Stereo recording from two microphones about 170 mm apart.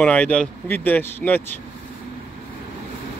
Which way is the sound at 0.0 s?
5° left (ahead or behind).